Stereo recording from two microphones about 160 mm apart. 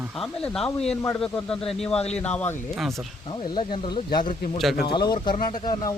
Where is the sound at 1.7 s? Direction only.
5° left (ahead or behind).